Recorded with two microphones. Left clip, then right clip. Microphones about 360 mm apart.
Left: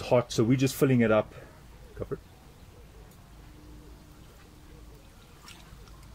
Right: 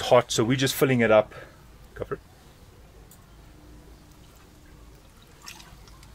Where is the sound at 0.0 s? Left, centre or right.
Right.